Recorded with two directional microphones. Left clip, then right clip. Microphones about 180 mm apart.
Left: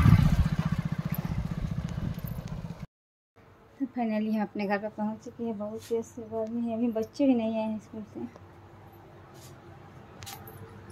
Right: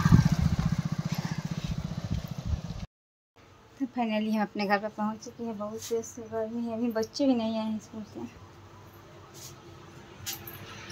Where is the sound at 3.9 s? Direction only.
15° left (ahead or behind).